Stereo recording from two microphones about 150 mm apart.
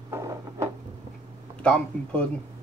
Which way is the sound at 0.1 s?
20° right (ahead or behind).